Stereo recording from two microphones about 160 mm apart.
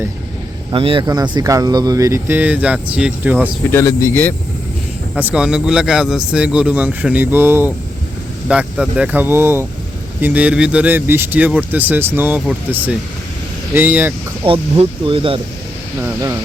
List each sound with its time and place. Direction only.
0.7 s speech: 35° right (ahead or behind); by 3.5 s 10° right (ahead or behind)
3.7 s speech: 15° left (ahead or behind)
5.1 s speech: 10° right (ahead or behind)
14.4 s speech: 35° right (ahead or behind)
16.0 s speech: 15° right (ahead or behind)